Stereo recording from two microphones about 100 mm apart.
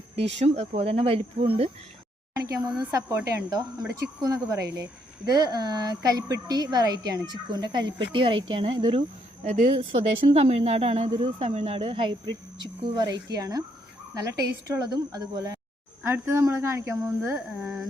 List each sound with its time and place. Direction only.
0.2 s speech: 90° right
2.3 s a woman's voice: 35° right (ahead or behind)
14.8 s speech: 40° right (ahead or behind)
16.0 s a woman's voice: 25° right (ahead or behind)
17.6 s a sound: 5° right (ahead or behind)